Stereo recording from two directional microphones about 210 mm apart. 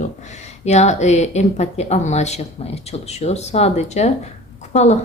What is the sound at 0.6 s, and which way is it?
Speech, 30° left (ahead or behind).